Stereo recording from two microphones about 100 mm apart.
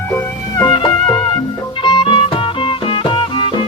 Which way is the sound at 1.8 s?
65° left (ahead or behind).